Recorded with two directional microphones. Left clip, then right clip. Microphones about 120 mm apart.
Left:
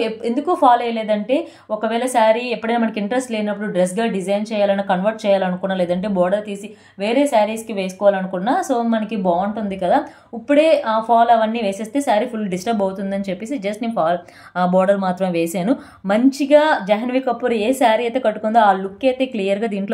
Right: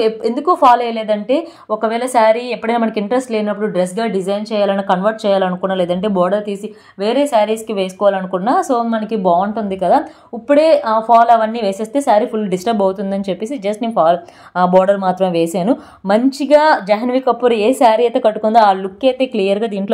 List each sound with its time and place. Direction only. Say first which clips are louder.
0.0 s a woman's voice: right 5 dB; 30° right (ahead or behind)